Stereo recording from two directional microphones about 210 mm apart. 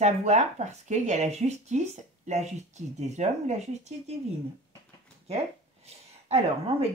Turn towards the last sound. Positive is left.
turn(degrees=-30)  # may be behind; listen again after turning